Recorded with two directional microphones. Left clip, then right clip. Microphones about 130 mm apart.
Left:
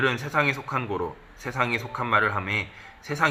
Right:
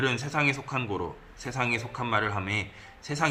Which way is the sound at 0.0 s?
25° right (ahead or behind).